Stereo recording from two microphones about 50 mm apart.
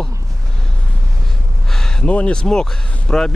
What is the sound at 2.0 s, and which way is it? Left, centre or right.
Speech, left.